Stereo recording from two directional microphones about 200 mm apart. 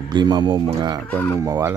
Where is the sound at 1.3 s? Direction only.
15° right (ahead or behind).